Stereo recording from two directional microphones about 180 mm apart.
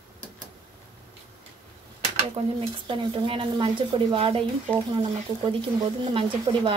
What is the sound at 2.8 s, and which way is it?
Speech, 30° right (ahead or behind).